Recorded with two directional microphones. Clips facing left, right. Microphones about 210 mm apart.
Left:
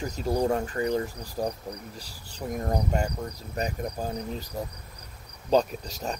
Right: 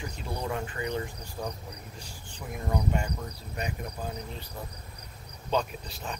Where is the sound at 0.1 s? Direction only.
40° left (ahead or behind).